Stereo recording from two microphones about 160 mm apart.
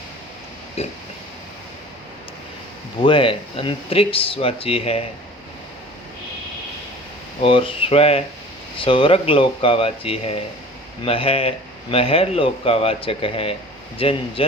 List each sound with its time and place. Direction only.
0.8 s speech: 40° left (ahead or behind)
3.0 s speech: 30° left (ahead or behind)
7.4 s speech: 35° left (ahead or behind)